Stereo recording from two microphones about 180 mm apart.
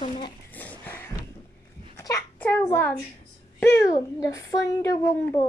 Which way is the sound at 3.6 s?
15° left (ahead or behind).